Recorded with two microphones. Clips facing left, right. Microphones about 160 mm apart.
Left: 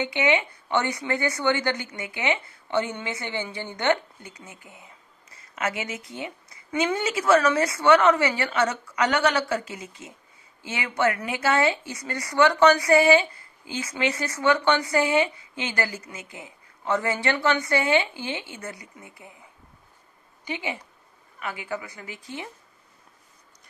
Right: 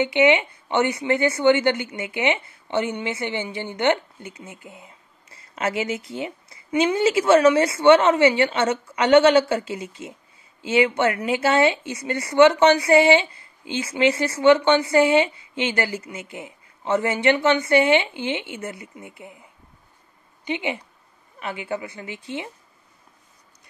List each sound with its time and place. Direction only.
0.0 s speech: 25° right (ahead or behind)
20.4 s speech: 20° right (ahead or behind)